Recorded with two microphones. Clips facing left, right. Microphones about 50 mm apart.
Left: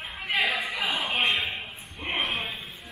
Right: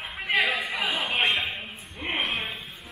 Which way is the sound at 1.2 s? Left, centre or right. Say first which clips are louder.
Right 1 dB; centre.